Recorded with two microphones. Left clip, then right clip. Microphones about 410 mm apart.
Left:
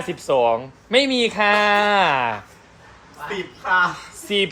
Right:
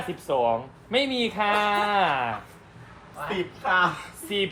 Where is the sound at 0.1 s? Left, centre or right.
Left.